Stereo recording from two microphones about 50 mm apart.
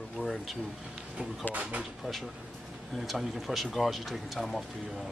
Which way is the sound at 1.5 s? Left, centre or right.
Right.